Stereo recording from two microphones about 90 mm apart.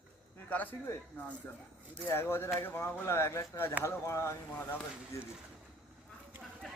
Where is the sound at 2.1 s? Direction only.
25° left (ahead or behind).